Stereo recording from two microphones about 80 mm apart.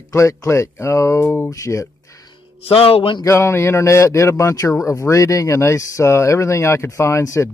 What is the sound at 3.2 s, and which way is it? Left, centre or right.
Speech, left.